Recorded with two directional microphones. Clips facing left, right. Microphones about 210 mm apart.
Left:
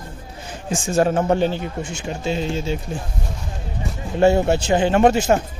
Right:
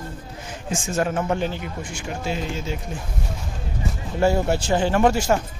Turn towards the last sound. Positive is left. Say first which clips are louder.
# left 3 dB
turn(degrees=25)  # may be behind; listen again after turning